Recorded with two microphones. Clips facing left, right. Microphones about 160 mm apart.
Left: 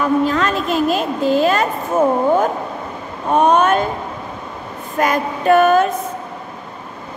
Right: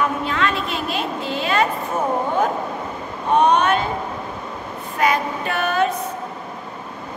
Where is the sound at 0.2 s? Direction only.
40° left (ahead or behind).